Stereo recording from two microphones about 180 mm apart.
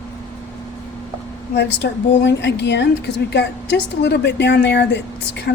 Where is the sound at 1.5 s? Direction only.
75° left (ahead or behind).